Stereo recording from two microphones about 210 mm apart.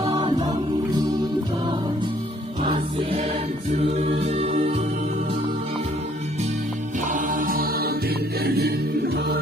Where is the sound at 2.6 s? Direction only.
25° right (ahead or behind).